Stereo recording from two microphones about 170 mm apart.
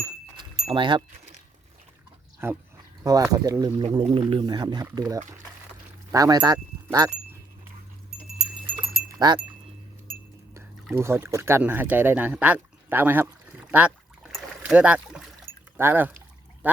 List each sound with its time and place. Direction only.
0.6 s speech: 30° right (ahead or behind)
2.4 s speech: 15° right (ahead or behind)
9.0 s a sound: 20° right (ahead or behind)
10.9 s speech: 15° right (ahead or behind)
14.3 s a sound: 5° right (ahead or behind)
15.8 s speech: 10° right (ahead or behind)